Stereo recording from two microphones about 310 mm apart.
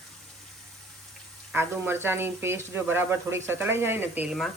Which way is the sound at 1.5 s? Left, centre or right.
Centre.